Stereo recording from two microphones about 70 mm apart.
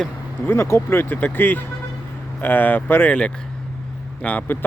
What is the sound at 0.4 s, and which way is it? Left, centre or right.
Speech, left.